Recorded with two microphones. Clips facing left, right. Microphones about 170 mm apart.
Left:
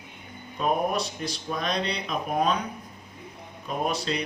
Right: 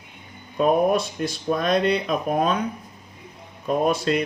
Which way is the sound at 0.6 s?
50° right (ahead or behind).